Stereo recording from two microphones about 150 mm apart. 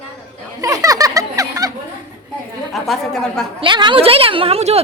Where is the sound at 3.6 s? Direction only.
30° right (ahead or behind).